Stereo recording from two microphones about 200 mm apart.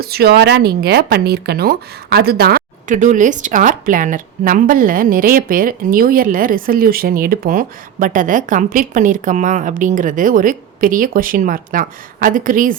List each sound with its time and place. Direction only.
0.0 s speech: 50° right (ahead or behind)